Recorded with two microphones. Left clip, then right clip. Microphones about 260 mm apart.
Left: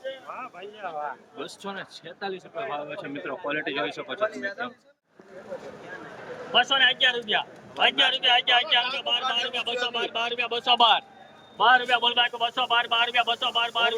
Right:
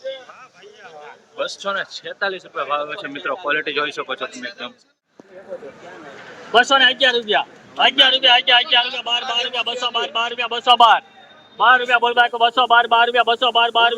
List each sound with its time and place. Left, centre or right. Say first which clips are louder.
1.4 s speech: right 17 dB; centre
6.5 s a man's voice: right 7 dB; right